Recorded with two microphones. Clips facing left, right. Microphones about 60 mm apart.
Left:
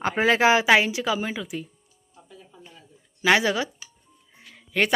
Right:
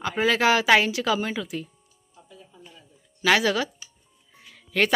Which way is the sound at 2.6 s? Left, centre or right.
Left.